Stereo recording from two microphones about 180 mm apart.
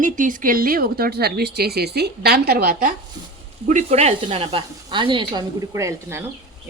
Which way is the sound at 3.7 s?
40° right (ahead or behind).